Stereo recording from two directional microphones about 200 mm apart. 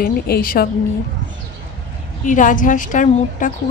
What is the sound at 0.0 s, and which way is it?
Speech, 50° left (ahead or behind).